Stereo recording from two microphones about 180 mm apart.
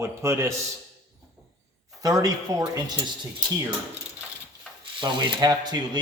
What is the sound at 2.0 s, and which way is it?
Speech, 20° right (ahead or behind).